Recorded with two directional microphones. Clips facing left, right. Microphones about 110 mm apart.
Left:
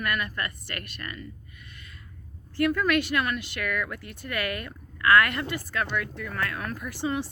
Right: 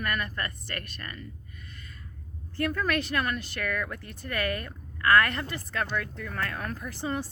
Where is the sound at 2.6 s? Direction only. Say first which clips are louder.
Left 4 dB; 35° right (ahead or behind).